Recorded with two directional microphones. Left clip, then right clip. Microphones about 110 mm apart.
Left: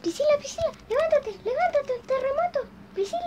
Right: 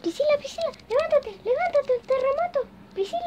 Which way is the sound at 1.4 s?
40° right (ahead or behind).